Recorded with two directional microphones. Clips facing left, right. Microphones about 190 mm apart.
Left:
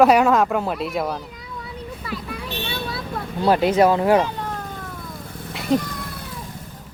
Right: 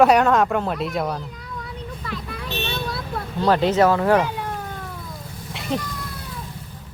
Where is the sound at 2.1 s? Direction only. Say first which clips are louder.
Left 1 dB; 10° left (ahead or behind).